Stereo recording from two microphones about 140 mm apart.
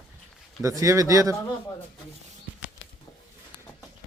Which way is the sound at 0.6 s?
20° right (ahead or behind).